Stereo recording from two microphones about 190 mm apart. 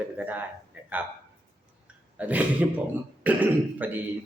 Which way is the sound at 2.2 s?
10° right (ahead or behind).